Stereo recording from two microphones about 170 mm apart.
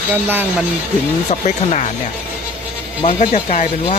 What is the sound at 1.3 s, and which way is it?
Speech, 40° left (ahead or behind).